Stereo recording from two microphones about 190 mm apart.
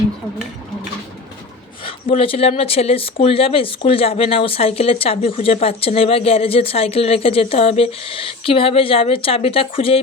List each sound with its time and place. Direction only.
1.8 s speech: 30° left (ahead or behind)